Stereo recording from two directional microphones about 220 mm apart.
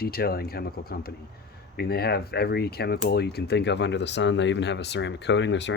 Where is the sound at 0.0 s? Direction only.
45° left (ahead or behind).